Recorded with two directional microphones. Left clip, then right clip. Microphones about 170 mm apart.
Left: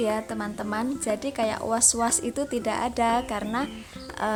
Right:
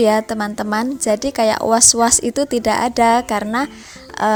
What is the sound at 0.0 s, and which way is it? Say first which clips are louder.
A woman's voice: right 12 dB; 45° right (ahead or behind).